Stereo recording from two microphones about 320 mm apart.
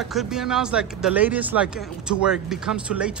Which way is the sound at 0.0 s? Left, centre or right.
Centre.